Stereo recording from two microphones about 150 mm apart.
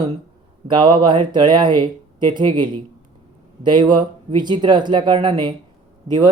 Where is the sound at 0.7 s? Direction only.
30° right (ahead or behind).